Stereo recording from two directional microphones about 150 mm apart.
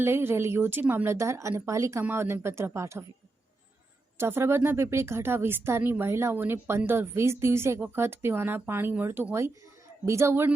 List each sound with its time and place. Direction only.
0.0 s speech: 15° right (ahead or behind)
4.2 s speech: 15° right (ahead or behind)